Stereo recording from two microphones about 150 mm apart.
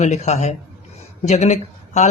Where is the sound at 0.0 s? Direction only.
50° left (ahead or behind).